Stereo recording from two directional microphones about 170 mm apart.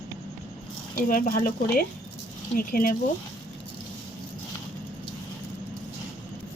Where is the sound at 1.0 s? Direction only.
55° left (ahead or behind).